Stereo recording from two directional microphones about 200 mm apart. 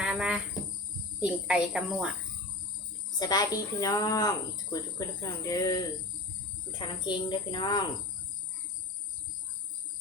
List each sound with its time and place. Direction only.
0.0 s cricket: 5° right (ahead or behind)
1.2 s speech: 5° right (ahead or behind)
3.2 s speech: 20° left (ahead or behind)